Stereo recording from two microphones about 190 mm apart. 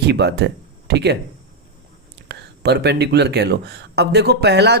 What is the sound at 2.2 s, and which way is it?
Speech, 60° right (ahead or behind).